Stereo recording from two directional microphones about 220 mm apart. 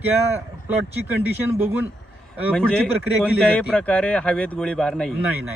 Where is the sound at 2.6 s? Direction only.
5° left (ahead or behind).